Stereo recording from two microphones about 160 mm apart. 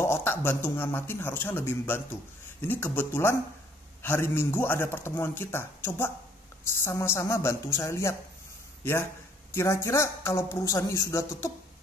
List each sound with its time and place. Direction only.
0.0 s a man's voice: 15° left (ahead or behind)
9.5 s speech: 15° left (ahead or behind)